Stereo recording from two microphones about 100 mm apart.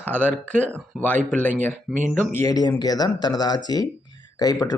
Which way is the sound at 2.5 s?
40° left (ahead or behind).